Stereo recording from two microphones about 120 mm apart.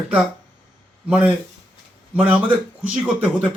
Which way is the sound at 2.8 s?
10° right (ahead or behind).